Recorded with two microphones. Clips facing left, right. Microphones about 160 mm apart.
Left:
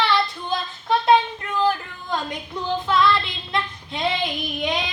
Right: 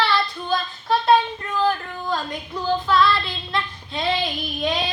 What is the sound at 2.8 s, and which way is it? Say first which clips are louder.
Child singing: left 1 dB; 20° left (ahead or behind).